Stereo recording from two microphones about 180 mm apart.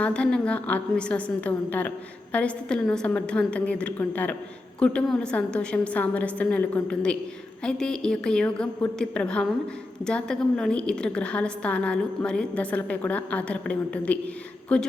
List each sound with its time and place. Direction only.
0.0 s a woman's voice: 5° left (ahead or behind)